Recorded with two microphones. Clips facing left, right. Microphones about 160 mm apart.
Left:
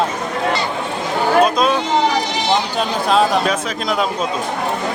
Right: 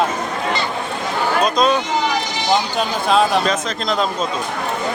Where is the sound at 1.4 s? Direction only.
5° left (ahead or behind).